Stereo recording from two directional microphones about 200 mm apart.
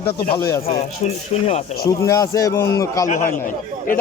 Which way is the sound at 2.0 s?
15° left (ahead or behind).